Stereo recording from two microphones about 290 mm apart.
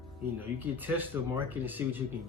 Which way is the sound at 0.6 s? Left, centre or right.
Centre.